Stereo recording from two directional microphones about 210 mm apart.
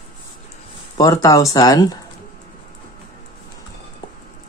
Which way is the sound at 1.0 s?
15° left (ahead or behind).